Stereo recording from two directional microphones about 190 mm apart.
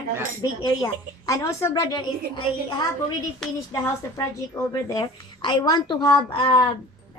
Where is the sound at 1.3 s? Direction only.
15° left (ahead or behind).